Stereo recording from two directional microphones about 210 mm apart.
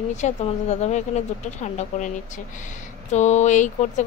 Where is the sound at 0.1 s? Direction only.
35° left (ahead or behind).